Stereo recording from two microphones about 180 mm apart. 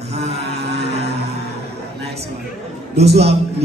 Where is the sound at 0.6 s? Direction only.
65° right (ahead or behind).